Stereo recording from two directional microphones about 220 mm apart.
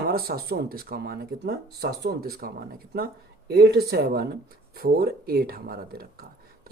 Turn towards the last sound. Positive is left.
turn(degrees=-45)  # may be behind; listen again after turning